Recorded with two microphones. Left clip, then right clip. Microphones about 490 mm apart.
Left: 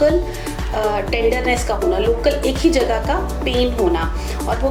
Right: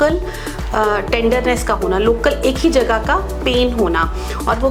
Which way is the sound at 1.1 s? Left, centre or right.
Right.